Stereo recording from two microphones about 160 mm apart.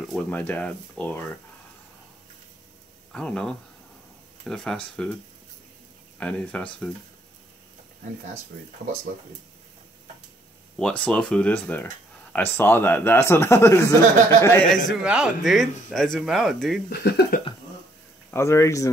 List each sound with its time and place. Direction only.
0.1 s speech: 10° left (ahead or behind)
3.1 s speech: 5° left (ahead or behind)
6.1 s speech: 5° left (ahead or behind)
10.8 s speech: 5° left (ahead or behind)
14.9 s speech: 5° right (ahead or behind)
16.9 s speech: 80° left
18.3 s speech: 15° left (ahead or behind)